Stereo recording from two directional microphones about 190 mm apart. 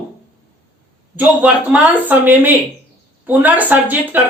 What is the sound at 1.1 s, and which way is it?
Speech, 10° right (ahead or behind).